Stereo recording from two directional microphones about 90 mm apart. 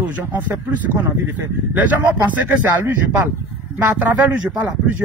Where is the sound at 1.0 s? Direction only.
25° right (ahead or behind).